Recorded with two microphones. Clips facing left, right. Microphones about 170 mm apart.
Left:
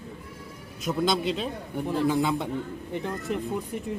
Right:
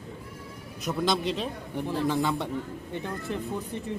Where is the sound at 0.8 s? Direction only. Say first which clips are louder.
Left 2 dB; centre (ahead or behind).